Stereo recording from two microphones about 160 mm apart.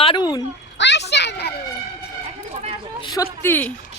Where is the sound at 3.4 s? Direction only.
10° left (ahead or behind).